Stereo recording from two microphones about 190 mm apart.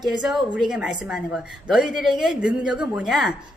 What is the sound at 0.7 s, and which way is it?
A woman's voice, 5° right (ahead or behind).